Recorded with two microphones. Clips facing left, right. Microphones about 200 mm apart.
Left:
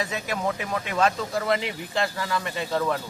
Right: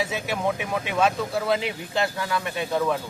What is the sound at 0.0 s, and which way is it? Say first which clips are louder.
Speech: right 2 dB; 5° right (ahead or behind).